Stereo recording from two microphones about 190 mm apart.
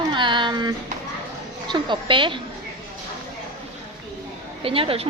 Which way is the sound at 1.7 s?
25° right (ahead or behind).